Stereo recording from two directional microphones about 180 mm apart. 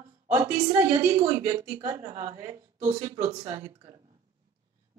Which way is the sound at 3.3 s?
25° right (ahead or behind).